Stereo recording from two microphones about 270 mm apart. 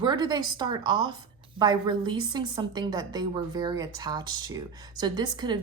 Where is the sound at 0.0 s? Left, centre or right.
Centre.